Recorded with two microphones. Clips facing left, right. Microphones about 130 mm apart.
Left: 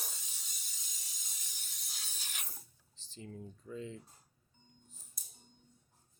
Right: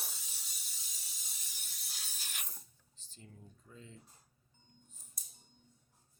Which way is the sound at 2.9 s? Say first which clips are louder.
Left 8 dB; 90° left.